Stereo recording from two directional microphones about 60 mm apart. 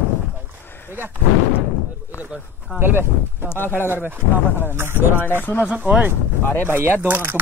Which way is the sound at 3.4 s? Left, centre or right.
Left.